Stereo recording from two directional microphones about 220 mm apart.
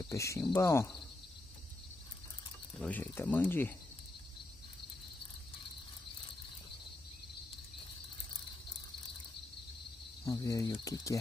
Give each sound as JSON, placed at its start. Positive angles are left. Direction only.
{"t": 0.1, "sound": "cricket", "side_deg": 15}
{"t": 2.8, "sound": "cricket", "side_deg": 10}
{"t": 10.2, "sound": "cricket", "side_deg": 15}